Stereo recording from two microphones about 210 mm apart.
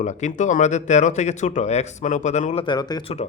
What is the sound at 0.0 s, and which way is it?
A man's voice, 35° left (ahead or behind).